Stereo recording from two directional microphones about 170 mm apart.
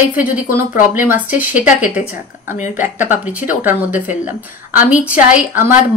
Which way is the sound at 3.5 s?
10° right (ahead or behind).